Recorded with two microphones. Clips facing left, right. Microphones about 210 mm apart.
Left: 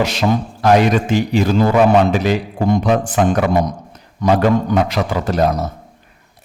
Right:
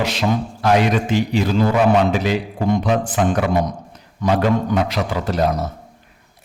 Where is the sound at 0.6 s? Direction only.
45° left (ahead or behind).